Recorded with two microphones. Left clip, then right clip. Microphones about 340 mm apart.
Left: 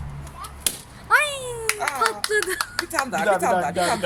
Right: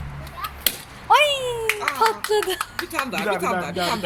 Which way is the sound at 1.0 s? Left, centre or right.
Centre.